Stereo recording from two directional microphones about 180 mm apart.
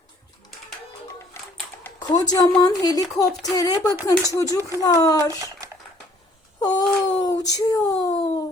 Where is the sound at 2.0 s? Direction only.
20° left (ahead or behind).